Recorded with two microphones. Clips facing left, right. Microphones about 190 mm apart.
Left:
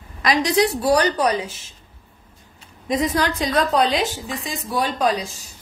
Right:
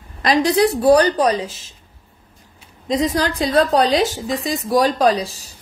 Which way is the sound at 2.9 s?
25° right (ahead or behind).